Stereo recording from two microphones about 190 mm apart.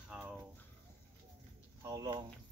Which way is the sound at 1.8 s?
20° right (ahead or behind).